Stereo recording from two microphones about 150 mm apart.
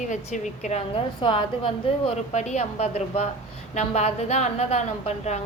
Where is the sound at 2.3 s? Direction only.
50° left (ahead or behind).